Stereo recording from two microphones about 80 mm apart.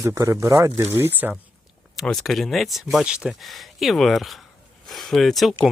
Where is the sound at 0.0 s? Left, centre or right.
Right.